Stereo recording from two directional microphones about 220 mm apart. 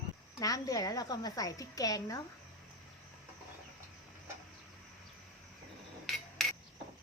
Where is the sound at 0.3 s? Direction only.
15° left (ahead or behind).